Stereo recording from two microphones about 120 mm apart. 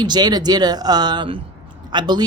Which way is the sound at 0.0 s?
35° right (ahead or behind).